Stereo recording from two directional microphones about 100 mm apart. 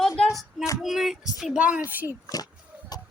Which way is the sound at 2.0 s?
35° left (ahead or behind).